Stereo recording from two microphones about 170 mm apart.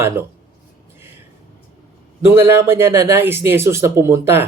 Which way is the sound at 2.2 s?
15° right (ahead or behind).